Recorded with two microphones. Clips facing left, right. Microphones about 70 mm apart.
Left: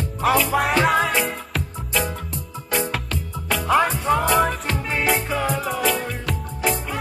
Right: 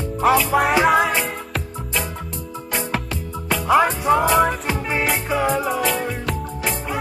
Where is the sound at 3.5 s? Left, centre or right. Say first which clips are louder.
Right 2 dB; centre.